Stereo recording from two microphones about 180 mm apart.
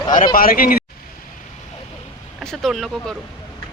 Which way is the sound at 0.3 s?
50° left (ahead or behind).